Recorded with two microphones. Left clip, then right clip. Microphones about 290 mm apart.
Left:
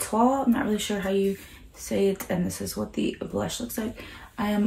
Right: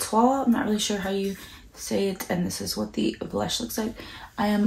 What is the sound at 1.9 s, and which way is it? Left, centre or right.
Speech, centre.